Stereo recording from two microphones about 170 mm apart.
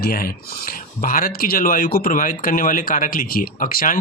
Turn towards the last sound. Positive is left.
turn(degrees=55)  # may be behind; listen again after turning